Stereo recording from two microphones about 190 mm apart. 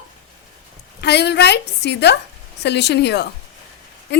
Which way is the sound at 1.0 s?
60° left (ahead or behind).